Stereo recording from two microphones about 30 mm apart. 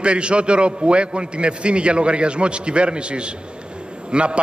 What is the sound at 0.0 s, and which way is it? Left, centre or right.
A man's voice, right.